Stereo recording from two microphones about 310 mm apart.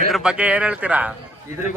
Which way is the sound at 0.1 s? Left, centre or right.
Centre.